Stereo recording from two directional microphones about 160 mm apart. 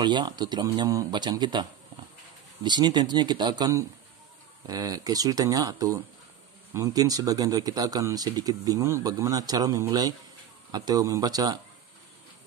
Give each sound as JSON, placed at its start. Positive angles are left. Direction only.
{"t": 0.0, "sound": "speech", "side_deg": -25}